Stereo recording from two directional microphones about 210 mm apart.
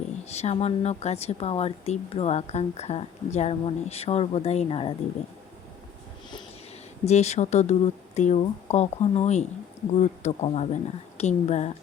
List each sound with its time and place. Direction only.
0.3 s a woman's voice: 30° left (ahead or behind)
7.0 s speech: 30° left (ahead or behind)